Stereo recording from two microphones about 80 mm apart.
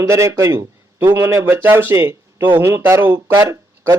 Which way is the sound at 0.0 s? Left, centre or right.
Right.